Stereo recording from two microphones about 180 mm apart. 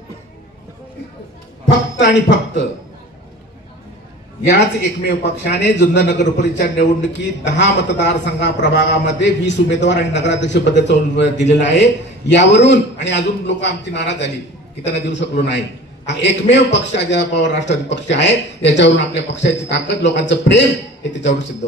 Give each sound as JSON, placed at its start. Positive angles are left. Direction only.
{"t": 2.0, "sound": "speech", "side_deg": 80}
{"t": 4.6, "sound": "a man's voice", "side_deg": 75}
{"t": 6.1, "sound": "a man's voice", "side_deg": 45}
{"t": 6.8, "sound": "a man's voice", "side_deg": 75}